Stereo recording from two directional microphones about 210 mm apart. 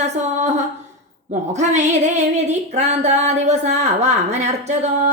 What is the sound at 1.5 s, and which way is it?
A woman's voice, 35° right (ahead or behind).